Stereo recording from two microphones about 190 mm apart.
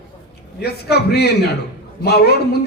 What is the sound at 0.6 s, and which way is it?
A man's voice, 60° left (ahead or behind).